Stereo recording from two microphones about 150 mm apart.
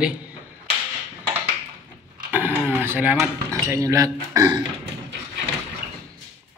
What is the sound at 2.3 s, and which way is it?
Cutlery, 10° right (ahead or behind).